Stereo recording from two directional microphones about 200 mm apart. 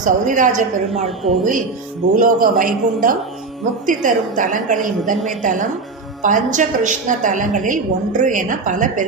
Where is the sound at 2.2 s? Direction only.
45° right (ahead or behind).